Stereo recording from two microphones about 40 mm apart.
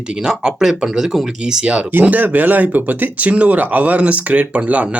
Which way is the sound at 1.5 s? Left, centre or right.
Right.